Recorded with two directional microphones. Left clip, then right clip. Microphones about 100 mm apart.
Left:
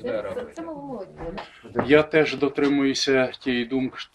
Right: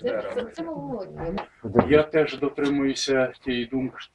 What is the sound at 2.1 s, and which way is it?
Speech, 15° left (ahead or behind).